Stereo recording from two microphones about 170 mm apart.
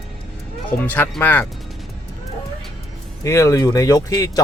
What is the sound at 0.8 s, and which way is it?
Speech, 10° left (ahead or behind).